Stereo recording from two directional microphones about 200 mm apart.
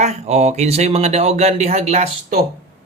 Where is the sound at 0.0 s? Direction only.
35° right (ahead or behind).